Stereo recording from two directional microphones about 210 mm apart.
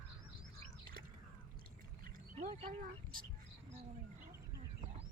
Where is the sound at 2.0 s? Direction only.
35° right (ahead or behind).